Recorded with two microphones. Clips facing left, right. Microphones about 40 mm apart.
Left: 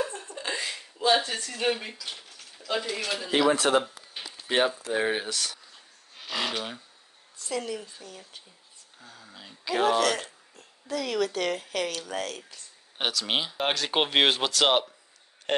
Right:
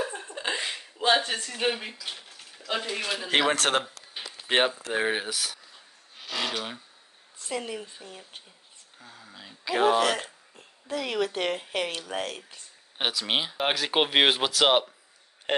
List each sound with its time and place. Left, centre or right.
0.0 s a sound: right
1.2 s speech: right; by 2.2 s centre
2.2 s a sound: right
2.9 s speech: centre
3.3 s speech: right
3.8 s a sound: centre
4.5 s speech: right
4.9 s speech: centre
6.2 s a sound: centre
7.3 s speech: right
9.0 s speech: centre; by 12.6 s right
12.9 s speech: centre